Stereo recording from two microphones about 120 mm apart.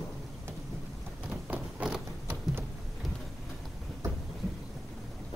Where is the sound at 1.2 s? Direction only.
10° right (ahead or behind).